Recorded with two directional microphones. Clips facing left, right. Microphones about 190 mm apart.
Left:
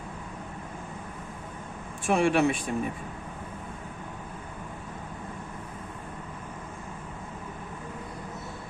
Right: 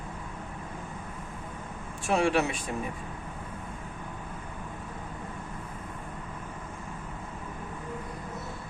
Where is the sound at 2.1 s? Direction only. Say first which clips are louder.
Left 3 dB; 55° left (ahead or behind).